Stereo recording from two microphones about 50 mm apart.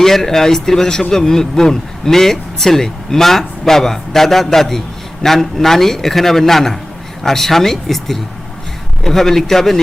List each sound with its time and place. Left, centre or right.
0.0 s speech: centre